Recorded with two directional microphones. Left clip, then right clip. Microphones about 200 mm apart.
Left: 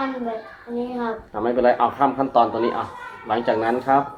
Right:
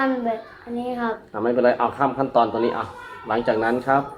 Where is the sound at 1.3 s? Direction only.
5° right (ahead or behind).